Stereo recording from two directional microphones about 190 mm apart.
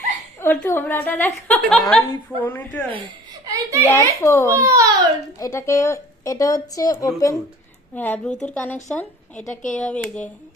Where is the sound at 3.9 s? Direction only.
15° left (ahead or behind).